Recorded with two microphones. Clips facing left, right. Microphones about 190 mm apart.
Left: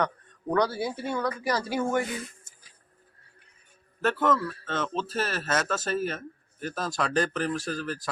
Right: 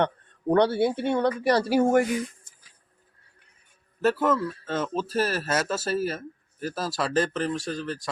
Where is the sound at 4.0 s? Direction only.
10° right (ahead or behind).